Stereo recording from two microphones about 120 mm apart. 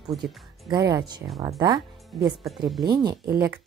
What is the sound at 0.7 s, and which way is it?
A woman's voice, 30° right (ahead or behind).